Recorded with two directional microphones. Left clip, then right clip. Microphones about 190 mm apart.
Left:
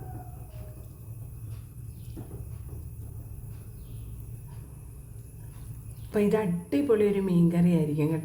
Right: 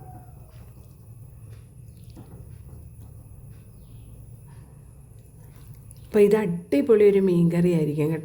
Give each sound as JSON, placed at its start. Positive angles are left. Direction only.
{"t": 6.1, "sound": "a woman's voice", "side_deg": -50}